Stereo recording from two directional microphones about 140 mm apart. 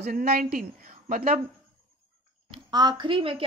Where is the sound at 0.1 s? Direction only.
90° right.